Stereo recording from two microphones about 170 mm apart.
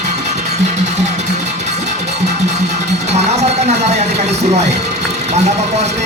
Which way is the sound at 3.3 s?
40° right (ahead or behind).